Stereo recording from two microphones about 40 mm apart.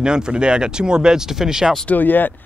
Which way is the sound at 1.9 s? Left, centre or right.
Left.